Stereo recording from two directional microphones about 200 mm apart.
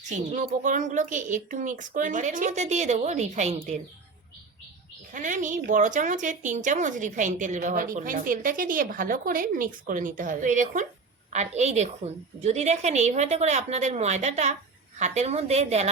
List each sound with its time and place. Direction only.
0.0 s a woman's voice: 40° right (ahead or behind)
5.1 s a woman's voice: 40° right (ahead or behind)